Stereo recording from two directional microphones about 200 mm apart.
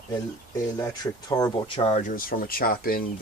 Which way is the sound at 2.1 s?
45° left (ahead or behind).